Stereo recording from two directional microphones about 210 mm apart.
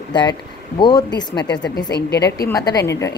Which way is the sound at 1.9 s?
50° left (ahead or behind).